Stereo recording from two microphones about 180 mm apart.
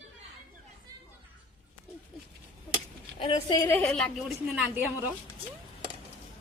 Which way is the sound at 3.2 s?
30° left (ahead or behind).